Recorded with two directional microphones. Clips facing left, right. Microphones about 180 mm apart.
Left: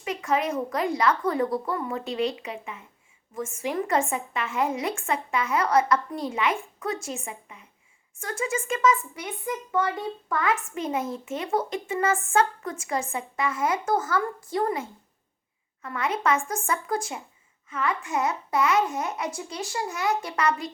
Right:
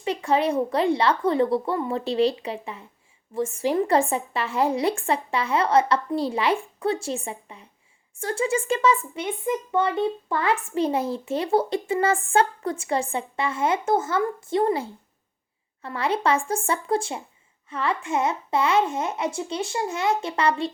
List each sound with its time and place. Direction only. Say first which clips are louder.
0.0 s speech: right 4 dB; 30° right (ahead or behind)